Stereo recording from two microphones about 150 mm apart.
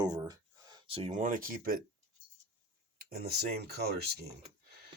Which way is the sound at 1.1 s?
60° right (ahead or behind).